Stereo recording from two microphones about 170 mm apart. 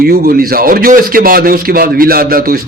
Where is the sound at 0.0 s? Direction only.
65° right (ahead or behind).